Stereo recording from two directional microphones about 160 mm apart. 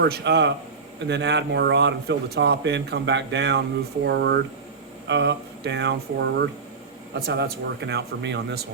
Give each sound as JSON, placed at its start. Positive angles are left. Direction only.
{"t": 0.0, "sound": "speech", "side_deg": -90}